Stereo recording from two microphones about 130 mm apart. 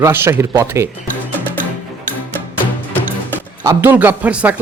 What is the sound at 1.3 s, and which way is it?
Music, 15° left (ahead or behind).